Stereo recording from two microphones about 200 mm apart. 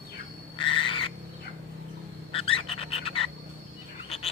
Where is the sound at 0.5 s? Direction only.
25° left (ahead or behind).